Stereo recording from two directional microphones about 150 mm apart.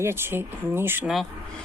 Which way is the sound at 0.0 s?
15° right (ahead or behind).